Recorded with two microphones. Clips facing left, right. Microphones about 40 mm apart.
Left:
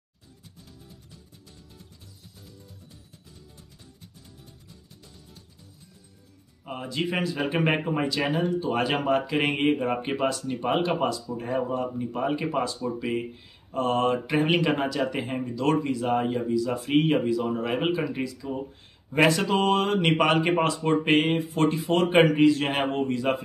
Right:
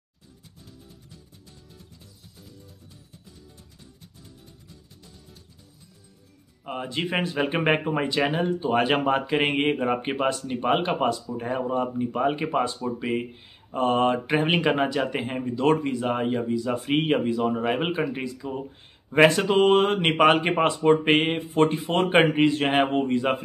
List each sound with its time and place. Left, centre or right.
6.6 s speech: centre
7.1 s speech: right